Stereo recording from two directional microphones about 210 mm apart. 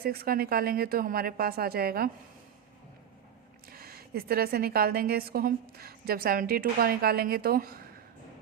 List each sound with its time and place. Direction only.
0.0 s a woman's voice: 45° right (ahead or behind)
3.7 s a woman's voice: 45° right (ahead or behind)